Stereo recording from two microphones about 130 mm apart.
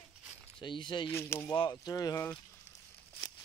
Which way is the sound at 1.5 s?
35° left (ahead or behind).